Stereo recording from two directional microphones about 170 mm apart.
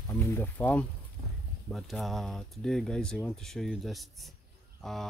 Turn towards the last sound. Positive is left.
turn(degrees=0)  # may be behind; listen again after turning